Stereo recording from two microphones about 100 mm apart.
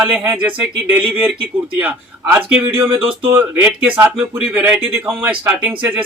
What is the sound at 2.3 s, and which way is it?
Speech, 20° right (ahead or behind).